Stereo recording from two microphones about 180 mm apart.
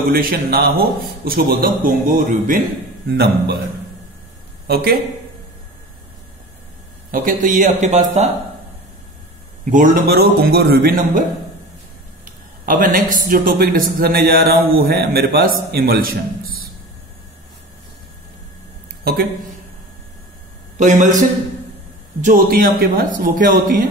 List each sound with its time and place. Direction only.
0.1 s a man's voice: 55° right (ahead or behind)
3.1 s speech: 60° right (ahead or behind)
4.6 s speech: 60° right (ahead or behind)
7.1 s a man's voice: 45° right (ahead or behind)
9.7 s speech: 50° right (ahead or behind)
12.6 s speech: 50° right (ahead or behind)
20.7 s a man's voice: 45° right (ahead or behind)
22.2 s a man's voice: 50° right (ahead or behind)